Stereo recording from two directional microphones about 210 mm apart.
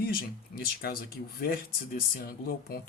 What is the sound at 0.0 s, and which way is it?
Speech, 45° left (ahead or behind).